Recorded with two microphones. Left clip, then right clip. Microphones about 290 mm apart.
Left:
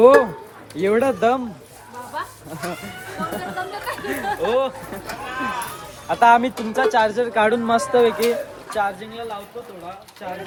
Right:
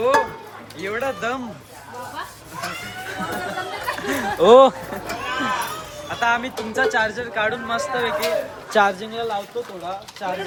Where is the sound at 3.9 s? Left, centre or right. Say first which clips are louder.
Right 5 dB; centre.